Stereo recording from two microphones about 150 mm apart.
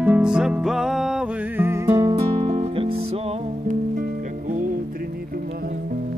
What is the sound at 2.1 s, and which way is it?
Music, 40° right (ahead or behind).